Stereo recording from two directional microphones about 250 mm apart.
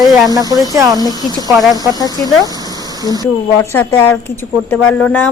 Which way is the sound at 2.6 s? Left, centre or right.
Centre.